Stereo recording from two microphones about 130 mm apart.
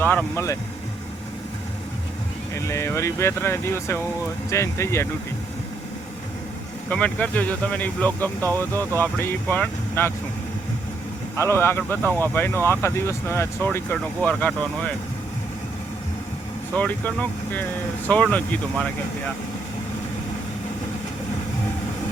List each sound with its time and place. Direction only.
0.0 s speech: 15° left (ahead or behind)
2.6 s speech: 20° left (ahead or behind)
6.9 s speech: 10° left (ahead or behind)
11.3 s speech: 20° left (ahead or behind)
16.7 s speech: 10° left (ahead or behind)